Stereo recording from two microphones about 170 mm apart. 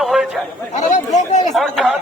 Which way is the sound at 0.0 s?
Centre (ahead or behind).